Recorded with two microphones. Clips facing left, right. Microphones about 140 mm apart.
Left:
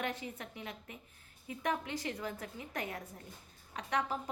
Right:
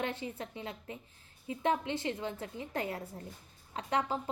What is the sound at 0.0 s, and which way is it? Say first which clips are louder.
A woman's voice: right 3 dB; 30° right (ahead or behind).